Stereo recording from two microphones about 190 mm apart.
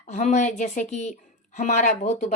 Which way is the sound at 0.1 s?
40° left (ahead or behind).